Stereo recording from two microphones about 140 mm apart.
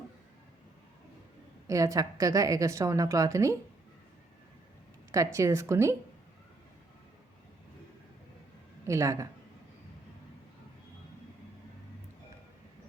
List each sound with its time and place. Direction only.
1.6 s a woman's voice: 25° right (ahead or behind)
5.1 s a woman's voice: 20° right (ahead or behind)
8.9 s a woman's voice: 20° right (ahead or behind)